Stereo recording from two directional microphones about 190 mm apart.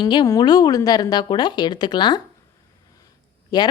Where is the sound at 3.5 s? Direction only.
20° left (ahead or behind).